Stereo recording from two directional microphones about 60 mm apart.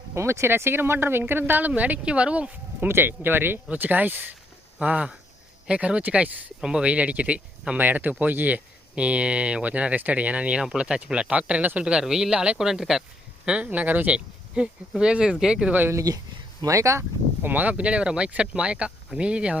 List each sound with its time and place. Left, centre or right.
0.1 s speech: right; by 2.5 s centre
2.8 s speech: right
4.8 s speech: centre
6.6 s speech: centre
7.8 s speech: right; by 13.0 s centre
13.6 s speech: right
14.5 s speech: centre
16.1 s speech: right
16.6 s speech: right
17.4 s speech: right